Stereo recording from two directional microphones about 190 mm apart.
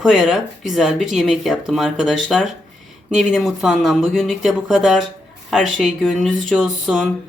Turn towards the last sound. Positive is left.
turn(degrees=0)  # may be behind; listen again after turning